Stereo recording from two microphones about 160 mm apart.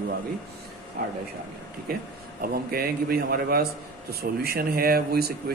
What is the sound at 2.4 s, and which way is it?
Speech, 70° right (ahead or behind).